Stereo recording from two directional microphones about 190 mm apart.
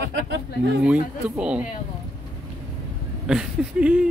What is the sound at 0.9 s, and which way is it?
Speech, 5° right (ahead or behind).